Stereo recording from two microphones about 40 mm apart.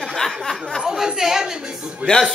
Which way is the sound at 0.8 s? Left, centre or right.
Centre.